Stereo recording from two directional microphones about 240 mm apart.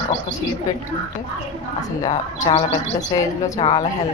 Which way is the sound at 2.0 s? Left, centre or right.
Centre.